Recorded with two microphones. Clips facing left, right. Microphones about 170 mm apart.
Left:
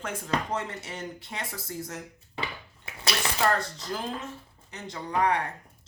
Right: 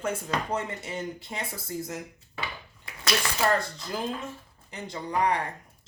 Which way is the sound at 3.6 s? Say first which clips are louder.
Even; 10° right (ahead or behind).